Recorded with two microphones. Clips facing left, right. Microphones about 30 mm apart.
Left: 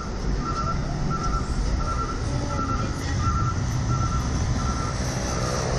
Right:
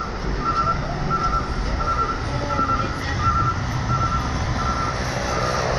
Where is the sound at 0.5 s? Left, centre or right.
Right.